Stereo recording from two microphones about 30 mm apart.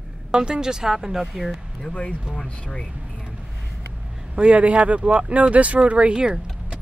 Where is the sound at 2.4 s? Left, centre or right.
Left.